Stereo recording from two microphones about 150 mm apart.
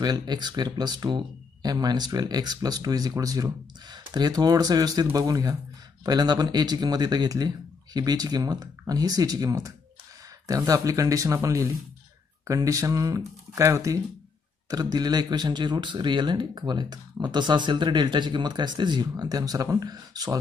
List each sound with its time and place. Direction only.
0.0 s speech: 30° right (ahead or behind)